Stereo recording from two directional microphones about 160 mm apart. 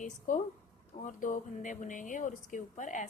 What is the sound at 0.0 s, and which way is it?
A woman's voice, 50° left (ahead or behind).